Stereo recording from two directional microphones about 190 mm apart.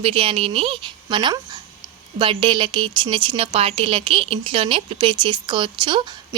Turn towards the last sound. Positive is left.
turn(degrees=-25)  # may be behind; listen again after turning